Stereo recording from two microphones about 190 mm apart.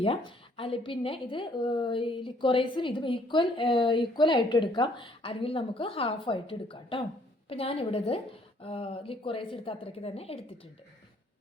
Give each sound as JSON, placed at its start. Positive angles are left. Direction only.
{"t": 0.0, "sound": "a woman's voice", "side_deg": 30}